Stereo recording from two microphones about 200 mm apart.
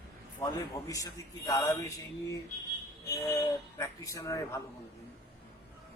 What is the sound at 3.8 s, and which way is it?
Speech, 15° left (ahead or behind).